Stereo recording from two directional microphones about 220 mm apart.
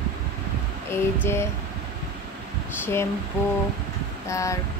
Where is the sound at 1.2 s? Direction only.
10° left (ahead or behind).